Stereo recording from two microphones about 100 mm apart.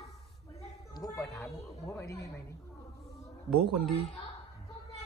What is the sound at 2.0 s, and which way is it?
Speech, 30° left (ahead or behind).